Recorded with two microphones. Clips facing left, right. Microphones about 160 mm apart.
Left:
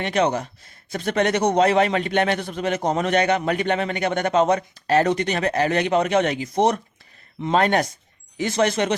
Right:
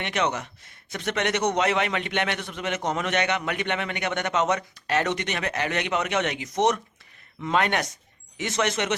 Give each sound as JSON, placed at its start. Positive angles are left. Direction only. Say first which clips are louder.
{"t": 0.0, "sound": "a man's voice", "louder": "left 6 dB", "side_deg": 35}